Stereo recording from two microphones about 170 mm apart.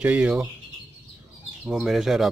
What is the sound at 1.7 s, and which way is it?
Speech, centre (ahead or behind).